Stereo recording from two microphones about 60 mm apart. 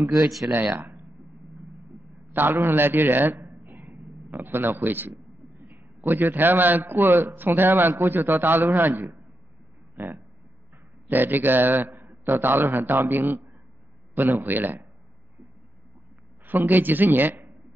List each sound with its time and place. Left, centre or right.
0.4 s a man's voice: right
2.3 s a man's voice: right
16.4 s a man's voice: right